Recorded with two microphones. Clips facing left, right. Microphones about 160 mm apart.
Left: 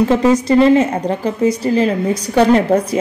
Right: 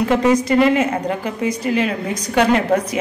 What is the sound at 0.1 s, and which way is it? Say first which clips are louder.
A woman's voice: left 3 dB; 30° left (ahead or behind).